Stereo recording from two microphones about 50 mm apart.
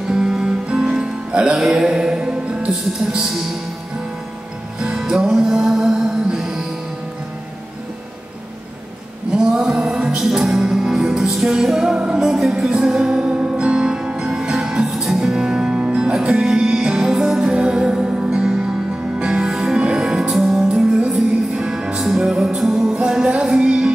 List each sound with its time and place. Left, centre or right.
0.1 s music: centre
2.7 s speech: centre
4.7 s music: centre
9.3 s music: centre
12.0 s music: centre
13.0 s music: centre
20.3 s music: centre
23.6 s music: centre